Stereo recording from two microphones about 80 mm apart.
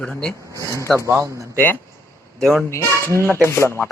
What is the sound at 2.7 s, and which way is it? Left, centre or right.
Speech, left.